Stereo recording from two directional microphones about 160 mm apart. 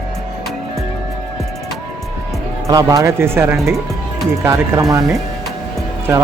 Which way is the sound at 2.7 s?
20° right (ahead or behind).